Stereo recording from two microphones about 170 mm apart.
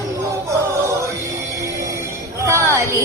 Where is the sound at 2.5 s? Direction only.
15° right (ahead or behind).